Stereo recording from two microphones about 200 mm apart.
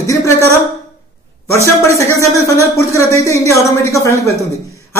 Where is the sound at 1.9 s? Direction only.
15° left (ahead or behind).